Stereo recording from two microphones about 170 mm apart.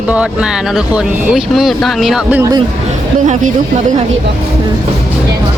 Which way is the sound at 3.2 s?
50° right (ahead or behind).